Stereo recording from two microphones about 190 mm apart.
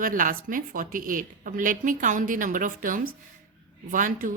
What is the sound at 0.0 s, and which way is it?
A woman's voice, 45° right (ahead or behind).